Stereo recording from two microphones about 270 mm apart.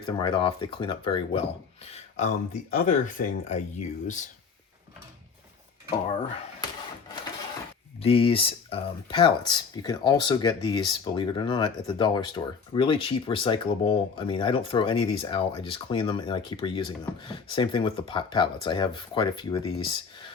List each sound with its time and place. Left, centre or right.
0.0 s speech: centre
8.0 s speech: centre